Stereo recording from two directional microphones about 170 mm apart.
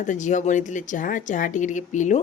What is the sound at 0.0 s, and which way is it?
A woman's voice, 45° left (ahead or behind).